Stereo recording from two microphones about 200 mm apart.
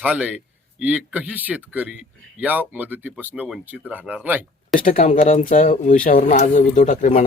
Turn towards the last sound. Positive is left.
turn(degrees=35)  # may be behind; listen again after turning